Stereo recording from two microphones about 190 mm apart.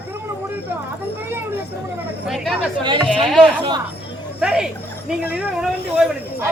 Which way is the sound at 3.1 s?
Centre (ahead or behind).